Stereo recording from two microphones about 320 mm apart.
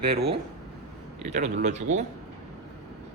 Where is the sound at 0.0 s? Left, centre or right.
Centre.